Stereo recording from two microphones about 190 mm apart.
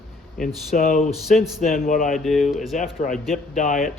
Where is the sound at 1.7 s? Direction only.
45° left (ahead or behind).